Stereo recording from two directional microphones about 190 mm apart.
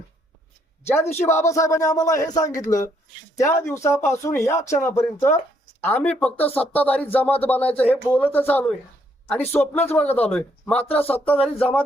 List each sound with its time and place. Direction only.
1.1 s speech: 15° left (ahead or behind)